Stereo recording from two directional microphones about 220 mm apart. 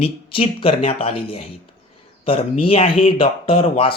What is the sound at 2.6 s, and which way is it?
Speech, 25° left (ahead or behind).